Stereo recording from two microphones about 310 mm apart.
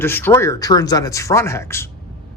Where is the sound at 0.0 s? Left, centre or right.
Centre.